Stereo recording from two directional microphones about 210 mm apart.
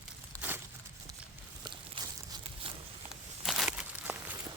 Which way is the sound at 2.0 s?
25° right (ahead or behind).